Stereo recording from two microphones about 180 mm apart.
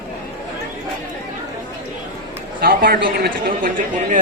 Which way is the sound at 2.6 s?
55° right (ahead or behind).